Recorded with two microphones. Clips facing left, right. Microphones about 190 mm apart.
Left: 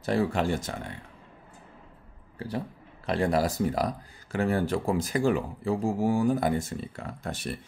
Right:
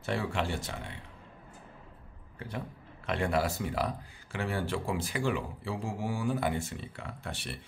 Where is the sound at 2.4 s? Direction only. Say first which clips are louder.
Left 6 dB; 35° left (ahead or behind).